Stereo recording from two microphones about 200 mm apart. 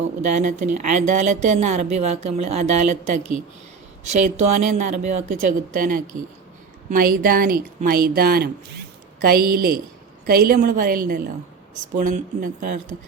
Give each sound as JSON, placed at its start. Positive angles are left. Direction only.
{"t": 0.2, "sound": "speech", "side_deg": -40}